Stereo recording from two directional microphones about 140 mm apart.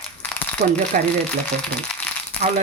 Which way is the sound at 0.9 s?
75° right (ahead or behind).